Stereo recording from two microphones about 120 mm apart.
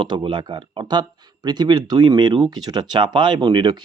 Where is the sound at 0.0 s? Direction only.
40° right (ahead or behind).